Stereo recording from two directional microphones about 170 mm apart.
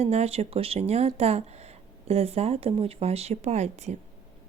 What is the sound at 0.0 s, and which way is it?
Speech, 40° right (ahead or behind).